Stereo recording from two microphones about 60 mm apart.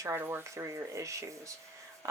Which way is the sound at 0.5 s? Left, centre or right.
Right.